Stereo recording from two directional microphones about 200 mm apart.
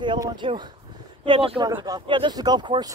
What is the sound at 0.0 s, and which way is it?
Speech, 25° right (ahead or behind).